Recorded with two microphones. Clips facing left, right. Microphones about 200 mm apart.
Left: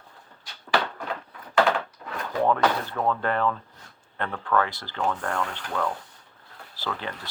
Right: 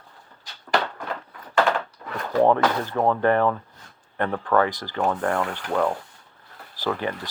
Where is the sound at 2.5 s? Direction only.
25° right (ahead or behind).